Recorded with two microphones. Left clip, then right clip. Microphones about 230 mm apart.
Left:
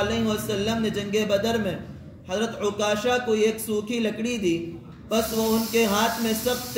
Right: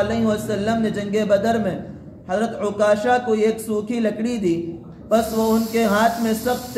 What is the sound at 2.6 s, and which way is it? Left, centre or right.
Speech, left.